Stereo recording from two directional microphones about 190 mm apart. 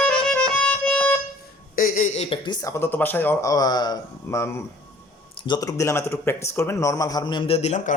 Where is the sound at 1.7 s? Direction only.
45° left (ahead or behind).